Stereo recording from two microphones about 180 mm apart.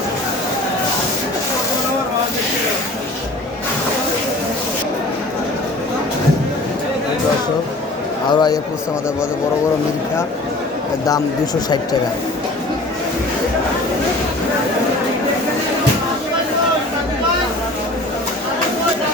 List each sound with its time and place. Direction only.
8.3 s speech: 25° left (ahead or behind)